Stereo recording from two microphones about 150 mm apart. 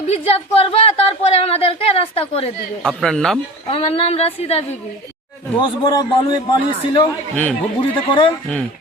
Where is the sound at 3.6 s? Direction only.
40° left (ahead or behind).